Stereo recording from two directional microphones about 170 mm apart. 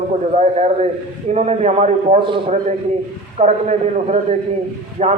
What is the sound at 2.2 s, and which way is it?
Speech, 30° right (ahead or behind).